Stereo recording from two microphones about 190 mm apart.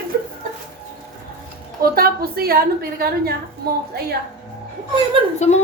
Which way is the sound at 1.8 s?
50° right (ahead or behind).